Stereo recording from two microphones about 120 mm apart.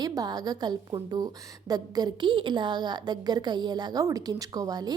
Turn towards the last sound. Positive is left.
turn(degrees=-35)  # may be behind; listen again after turning